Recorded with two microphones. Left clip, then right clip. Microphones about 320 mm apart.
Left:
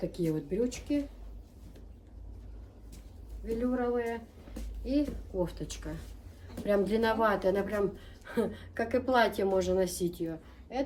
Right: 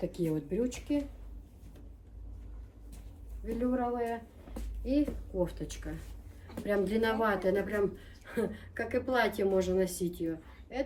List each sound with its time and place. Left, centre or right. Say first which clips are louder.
0.0 s speech: left 1 dB; centre
3.4 s speech: left 1 dB; centre
4.5 s a sound: even; centre
4.9 s speech: even; centre